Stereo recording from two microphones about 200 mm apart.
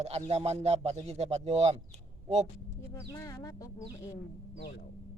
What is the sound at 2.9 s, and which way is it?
Speech, 15° left (ahead or behind).